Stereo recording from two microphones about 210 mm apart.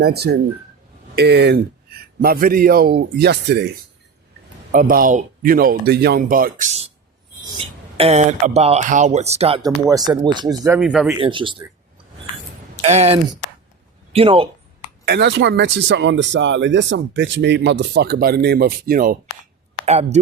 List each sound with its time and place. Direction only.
0.0 s a man's voice: 50° right (ahead or behind)
4.7 s a man's voice: 40° right (ahead or behind)
7.6 s speech: 25° right (ahead or behind)
9.6 s speech: 15° right (ahead or behind)
10.8 s speech: centre (ahead or behind)
11.2 s speech: 25° right (ahead or behind)
12.8 s speech: 30° right (ahead or behind)
15.0 s speech: 55° right (ahead or behind)
19.8 s speech: 30° right (ahead or behind)